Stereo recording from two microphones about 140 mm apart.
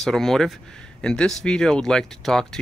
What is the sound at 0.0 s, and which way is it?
Speech, centre (ahead or behind).